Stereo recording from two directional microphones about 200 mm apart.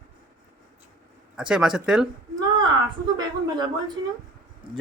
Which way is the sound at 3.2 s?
20° right (ahead or behind).